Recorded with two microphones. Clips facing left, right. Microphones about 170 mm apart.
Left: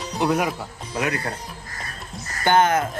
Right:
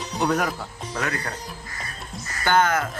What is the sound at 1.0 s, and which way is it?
Speech, 20° left (ahead or behind).